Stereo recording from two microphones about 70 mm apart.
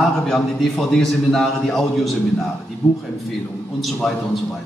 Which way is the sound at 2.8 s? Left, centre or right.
Left.